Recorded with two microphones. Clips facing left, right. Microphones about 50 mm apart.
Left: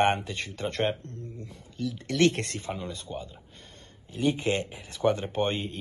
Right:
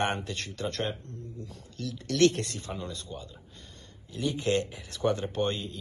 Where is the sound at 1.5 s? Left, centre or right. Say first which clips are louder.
Left 6 dB; centre.